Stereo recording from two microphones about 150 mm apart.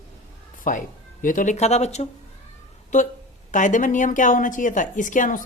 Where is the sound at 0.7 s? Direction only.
65° left (ahead or behind).